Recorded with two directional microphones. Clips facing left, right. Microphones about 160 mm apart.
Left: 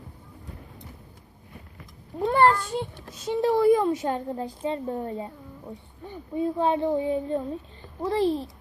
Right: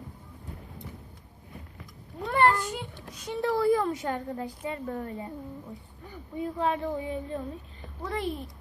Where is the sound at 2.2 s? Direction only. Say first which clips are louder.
Left 4 dB; 30° left (ahead or behind).